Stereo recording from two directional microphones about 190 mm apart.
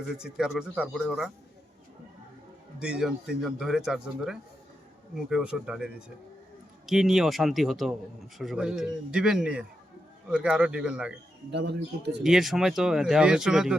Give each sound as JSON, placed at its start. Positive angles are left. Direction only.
{"t": 0.2, "sound": "speech", "side_deg": -5}
{"t": 2.8, "sound": "speech", "side_deg": -5}
{"t": 11.5, "sound": "speech", "side_deg": -65}
{"t": 12.2, "sound": "speech", "side_deg": 0}